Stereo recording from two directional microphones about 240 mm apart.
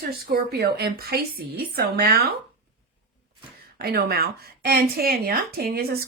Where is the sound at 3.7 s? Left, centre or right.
Right.